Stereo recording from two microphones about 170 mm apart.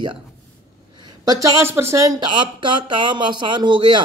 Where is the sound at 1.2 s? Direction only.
20° right (ahead or behind).